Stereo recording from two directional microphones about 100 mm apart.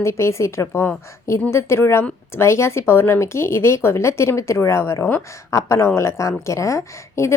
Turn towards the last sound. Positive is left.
turn(degrees=30)  # may be behind; listen again after turning